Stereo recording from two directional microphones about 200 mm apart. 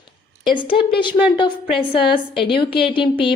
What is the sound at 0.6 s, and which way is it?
Speech, 25° left (ahead or behind).